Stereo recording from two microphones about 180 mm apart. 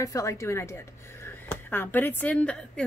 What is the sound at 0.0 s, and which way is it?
A woman's voice, 15° left (ahead or behind).